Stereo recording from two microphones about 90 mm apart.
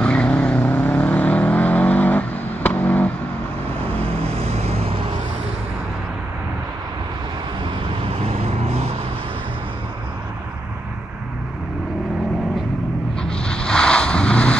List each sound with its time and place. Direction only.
0.0 s vehicle: 10° left (ahead or behind)
8.2 s vehicle: 90° right
13.2 s a sound: 10° left (ahead or behind)